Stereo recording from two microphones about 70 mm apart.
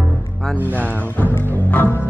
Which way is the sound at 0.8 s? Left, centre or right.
Right.